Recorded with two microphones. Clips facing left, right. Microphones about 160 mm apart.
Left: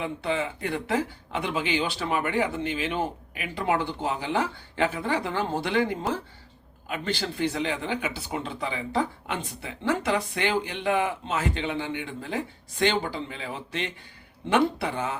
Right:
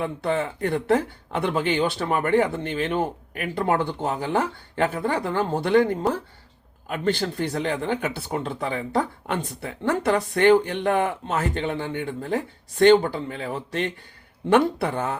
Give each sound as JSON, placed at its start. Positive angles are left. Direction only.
{"t": 0.0, "sound": "speech", "side_deg": -50}